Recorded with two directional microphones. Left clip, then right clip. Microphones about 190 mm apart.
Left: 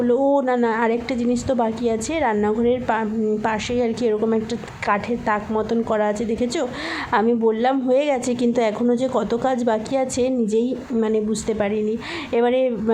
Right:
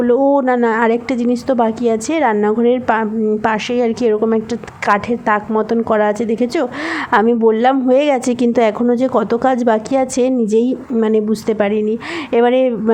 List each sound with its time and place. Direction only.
0.0 s a woman's voice: 35° right (ahead or behind)